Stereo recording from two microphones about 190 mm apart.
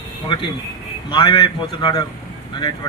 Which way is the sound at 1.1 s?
25° left (ahead or behind).